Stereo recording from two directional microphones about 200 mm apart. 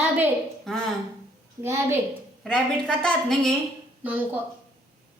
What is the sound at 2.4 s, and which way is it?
A woman's voice, 5° left (ahead or behind).